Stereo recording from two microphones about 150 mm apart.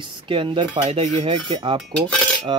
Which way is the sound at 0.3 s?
35° right (ahead or behind).